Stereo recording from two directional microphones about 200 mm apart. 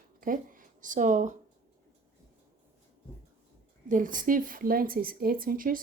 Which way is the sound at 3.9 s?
40° right (ahead or behind).